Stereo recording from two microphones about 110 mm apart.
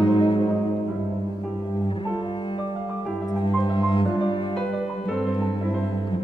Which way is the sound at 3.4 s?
50° left (ahead or behind).